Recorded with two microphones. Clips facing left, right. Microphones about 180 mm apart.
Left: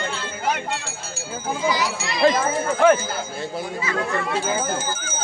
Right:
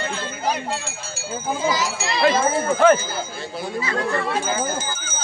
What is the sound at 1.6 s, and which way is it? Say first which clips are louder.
Speech: even; 45° right (ahead or behind).